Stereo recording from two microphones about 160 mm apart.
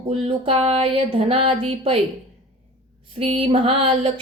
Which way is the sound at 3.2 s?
35° right (ahead or behind).